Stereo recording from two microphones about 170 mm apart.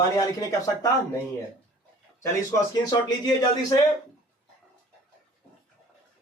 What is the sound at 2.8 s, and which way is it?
Speech, 25° left (ahead or behind).